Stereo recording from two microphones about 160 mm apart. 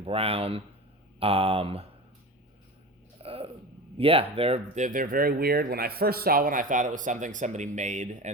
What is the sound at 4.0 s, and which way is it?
Speech, 35° right (ahead or behind).